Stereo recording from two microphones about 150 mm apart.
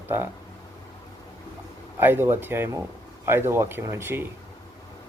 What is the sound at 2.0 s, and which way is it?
Speech, 15° right (ahead or behind).